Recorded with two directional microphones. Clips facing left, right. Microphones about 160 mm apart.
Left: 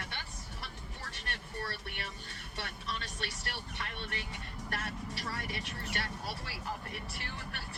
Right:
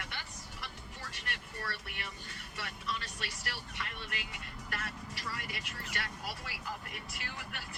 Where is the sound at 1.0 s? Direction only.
30° left (ahead or behind).